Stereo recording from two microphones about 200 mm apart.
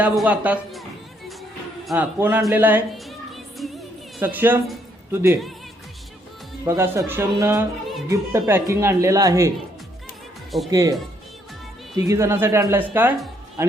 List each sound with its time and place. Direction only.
0.0 s speech: 5° right (ahead or behind)
2.1 s speech: 10° right (ahead or behind)
2.5 s music: 10° right (ahead or behind)
4.2 s a man's voice: 10° right (ahead or behind)
6.7 s speech: 10° right (ahead or behind)
10.7 s speech: 15° right (ahead or behind)
11.9 s speech: 15° right (ahead or behind)